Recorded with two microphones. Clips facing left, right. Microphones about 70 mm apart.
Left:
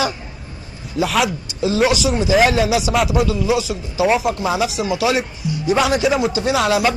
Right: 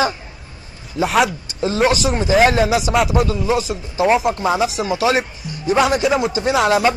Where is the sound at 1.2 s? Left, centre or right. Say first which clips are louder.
Left 1 dB; right.